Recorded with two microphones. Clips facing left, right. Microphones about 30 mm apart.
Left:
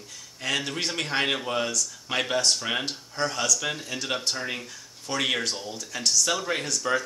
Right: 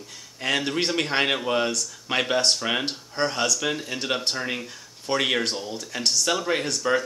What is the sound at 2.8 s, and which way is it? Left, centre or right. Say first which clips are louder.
Speech: right 3 dB; right.